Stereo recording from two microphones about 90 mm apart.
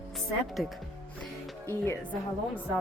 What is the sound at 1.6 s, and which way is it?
Speech, 25° left (ahead or behind).